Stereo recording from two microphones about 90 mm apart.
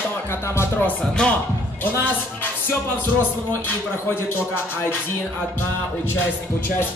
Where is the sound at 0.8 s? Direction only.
10° left (ahead or behind).